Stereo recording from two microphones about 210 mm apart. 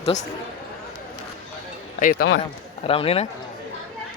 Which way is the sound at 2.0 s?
45° left (ahead or behind).